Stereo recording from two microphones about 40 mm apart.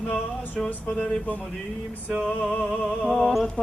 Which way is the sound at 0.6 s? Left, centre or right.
Left.